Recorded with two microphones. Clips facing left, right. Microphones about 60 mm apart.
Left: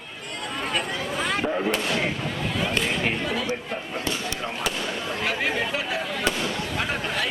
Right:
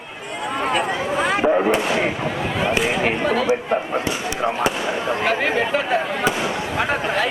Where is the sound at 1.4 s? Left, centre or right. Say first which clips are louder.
Right 10 dB; right.